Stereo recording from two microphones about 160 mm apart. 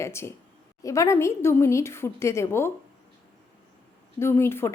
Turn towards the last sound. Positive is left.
turn(degrees=15)  # may be behind; listen again after turning